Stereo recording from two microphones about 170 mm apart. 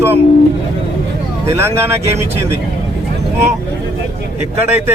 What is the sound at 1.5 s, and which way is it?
Speech, 15° right (ahead or behind).